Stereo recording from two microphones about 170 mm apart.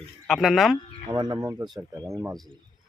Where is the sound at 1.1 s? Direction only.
25° right (ahead or behind).